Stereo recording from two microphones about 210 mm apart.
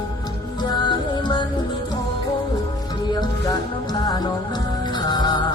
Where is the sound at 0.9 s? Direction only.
20° left (ahead or behind).